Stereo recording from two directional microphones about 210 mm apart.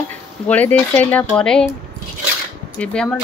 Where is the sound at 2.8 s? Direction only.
5° left (ahead or behind).